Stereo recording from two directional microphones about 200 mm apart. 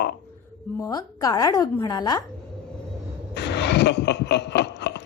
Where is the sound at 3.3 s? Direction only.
60° left (ahead or behind).